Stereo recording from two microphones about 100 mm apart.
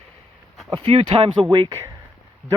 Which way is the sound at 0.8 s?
70° right (ahead or behind).